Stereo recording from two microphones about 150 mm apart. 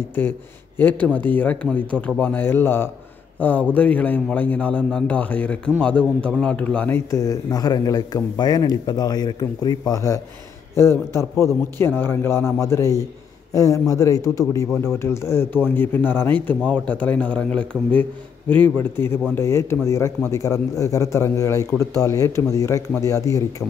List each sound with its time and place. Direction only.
0.7 s a man's voice: 10° left (ahead or behind)